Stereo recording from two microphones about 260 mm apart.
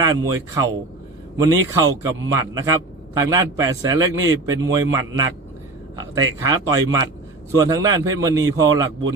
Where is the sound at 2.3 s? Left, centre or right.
Centre.